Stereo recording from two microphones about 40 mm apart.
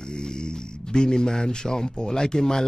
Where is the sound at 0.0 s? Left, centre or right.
Centre.